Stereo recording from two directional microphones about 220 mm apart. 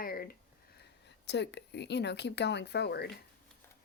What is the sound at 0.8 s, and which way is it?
Speech, 50° left (ahead or behind).